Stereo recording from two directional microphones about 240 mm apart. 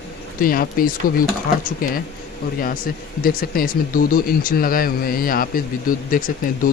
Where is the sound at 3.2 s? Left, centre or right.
Left.